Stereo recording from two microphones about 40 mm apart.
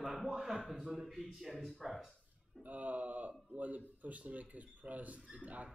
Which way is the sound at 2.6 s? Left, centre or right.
Right.